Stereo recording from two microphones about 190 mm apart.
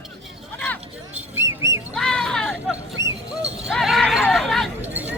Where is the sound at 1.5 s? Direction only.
15° right (ahead or behind).